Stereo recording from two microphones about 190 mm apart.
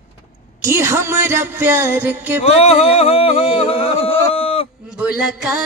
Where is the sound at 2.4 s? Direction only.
35° left (ahead or behind).